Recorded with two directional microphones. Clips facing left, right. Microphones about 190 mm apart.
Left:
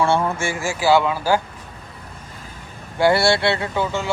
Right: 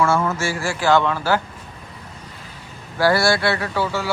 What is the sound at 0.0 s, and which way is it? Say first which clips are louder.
Speech: even; 30° left (ahead or behind).